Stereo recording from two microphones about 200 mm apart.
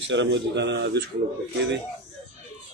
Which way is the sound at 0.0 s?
65° right (ahead or behind).